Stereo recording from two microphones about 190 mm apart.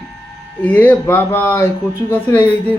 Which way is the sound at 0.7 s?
10° left (ahead or behind).